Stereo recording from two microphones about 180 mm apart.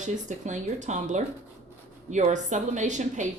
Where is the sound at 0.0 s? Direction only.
45° right (ahead or behind).